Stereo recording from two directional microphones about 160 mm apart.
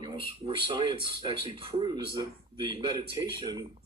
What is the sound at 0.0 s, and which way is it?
Speech, 30° right (ahead or behind).